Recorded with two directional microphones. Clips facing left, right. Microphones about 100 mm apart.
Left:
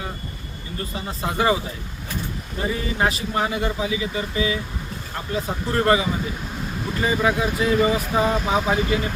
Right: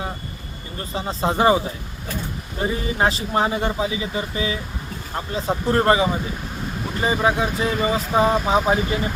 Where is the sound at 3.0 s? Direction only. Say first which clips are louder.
Right 3 dB; 30° right (ahead or behind).